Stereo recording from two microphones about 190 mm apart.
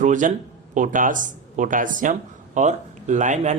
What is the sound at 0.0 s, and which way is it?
A man's voice, 40° right (ahead or behind).